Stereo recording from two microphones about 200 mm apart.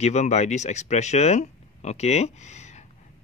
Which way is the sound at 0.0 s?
35° left (ahead or behind).